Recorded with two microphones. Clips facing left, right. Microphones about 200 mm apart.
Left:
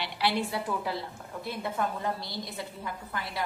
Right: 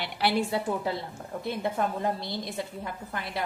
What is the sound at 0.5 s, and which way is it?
Speech, 25° right (ahead or behind).